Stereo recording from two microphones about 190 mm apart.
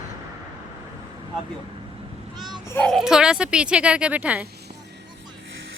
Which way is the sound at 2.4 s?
20° right (ahead or behind).